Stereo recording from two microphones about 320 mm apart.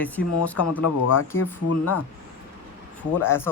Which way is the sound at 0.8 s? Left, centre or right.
Left.